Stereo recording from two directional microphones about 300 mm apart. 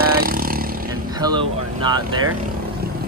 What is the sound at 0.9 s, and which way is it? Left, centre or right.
Vehicle, centre.